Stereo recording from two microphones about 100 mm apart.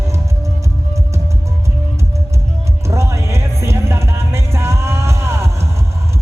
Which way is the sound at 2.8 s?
30° right (ahead or behind).